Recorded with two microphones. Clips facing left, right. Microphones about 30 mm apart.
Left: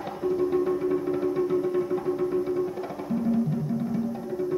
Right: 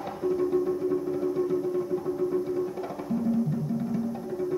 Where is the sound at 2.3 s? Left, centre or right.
Left.